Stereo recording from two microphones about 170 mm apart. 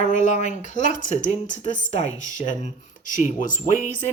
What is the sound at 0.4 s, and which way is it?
Speech, 45° left (ahead or behind).